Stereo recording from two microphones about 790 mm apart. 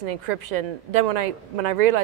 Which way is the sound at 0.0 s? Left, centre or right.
Right.